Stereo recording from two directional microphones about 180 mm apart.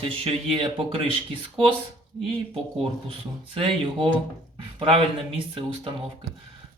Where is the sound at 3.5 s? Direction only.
30° right (ahead or behind).